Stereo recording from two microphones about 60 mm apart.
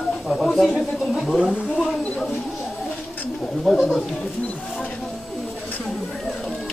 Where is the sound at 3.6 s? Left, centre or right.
Centre.